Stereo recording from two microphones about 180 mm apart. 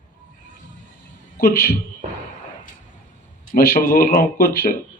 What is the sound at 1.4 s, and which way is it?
Speech, 55° left (ahead or behind).